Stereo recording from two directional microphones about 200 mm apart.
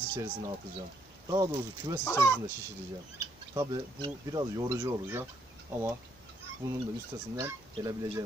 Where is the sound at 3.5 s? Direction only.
20° right (ahead or behind).